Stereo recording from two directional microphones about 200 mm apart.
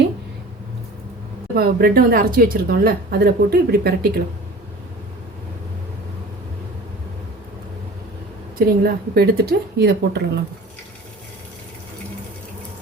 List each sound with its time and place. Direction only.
1.5 s speech: 50° right (ahead or behind)
8.5 s speech: 50° right (ahead or behind)